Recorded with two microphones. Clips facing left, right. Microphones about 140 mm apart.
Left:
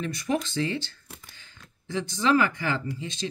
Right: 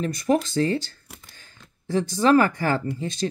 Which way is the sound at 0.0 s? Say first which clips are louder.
Right 6 dB; 40° right (ahead or behind).